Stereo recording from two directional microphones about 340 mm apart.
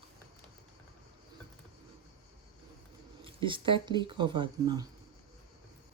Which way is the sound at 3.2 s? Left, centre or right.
Centre.